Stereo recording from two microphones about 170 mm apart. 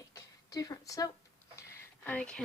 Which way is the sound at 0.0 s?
20° left (ahead or behind).